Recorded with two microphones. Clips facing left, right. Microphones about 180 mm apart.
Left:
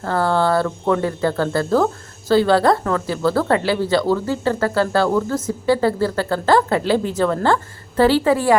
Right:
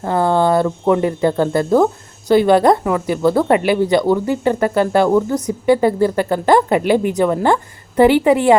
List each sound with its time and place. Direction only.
0.0 s speech: 20° right (ahead or behind)